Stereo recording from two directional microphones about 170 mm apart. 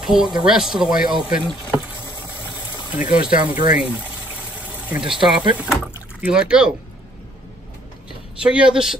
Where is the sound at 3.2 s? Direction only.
10° right (ahead or behind).